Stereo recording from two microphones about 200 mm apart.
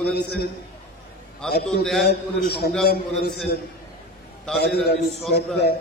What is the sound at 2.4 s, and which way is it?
Speech, 55° left (ahead or behind).